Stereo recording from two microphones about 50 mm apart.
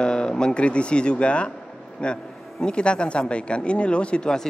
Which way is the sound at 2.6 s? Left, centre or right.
Centre.